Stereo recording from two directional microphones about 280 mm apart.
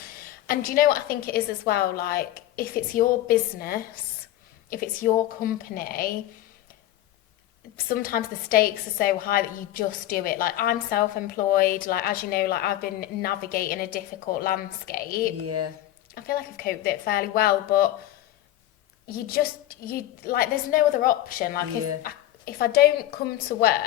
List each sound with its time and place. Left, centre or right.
0.4 s a woman's voice: left
7.9 s a woman's voice: left
15.4 s speech: right
16.1 s a woman's voice: left
19.0 s a woman's voice: left